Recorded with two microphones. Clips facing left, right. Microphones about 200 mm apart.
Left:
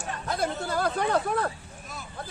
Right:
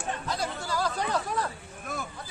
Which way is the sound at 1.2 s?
55° left (ahead or behind).